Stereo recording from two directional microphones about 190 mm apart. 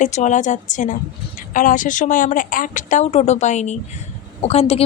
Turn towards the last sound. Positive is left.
turn(degrees=30)  # may be behind; listen again after turning